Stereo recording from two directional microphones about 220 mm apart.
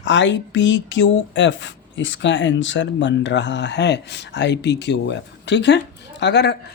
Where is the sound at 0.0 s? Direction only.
55° left (ahead or behind).